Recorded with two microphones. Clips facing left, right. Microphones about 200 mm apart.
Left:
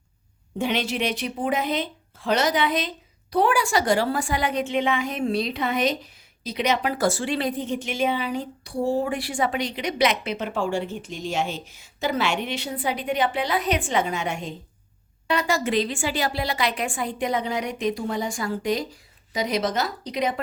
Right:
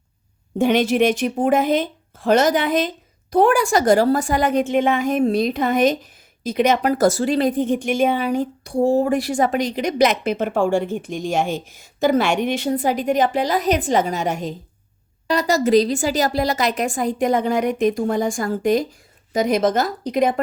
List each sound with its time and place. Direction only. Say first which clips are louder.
0.6 s speech: right 9 dB; 45° right (ahead or behind)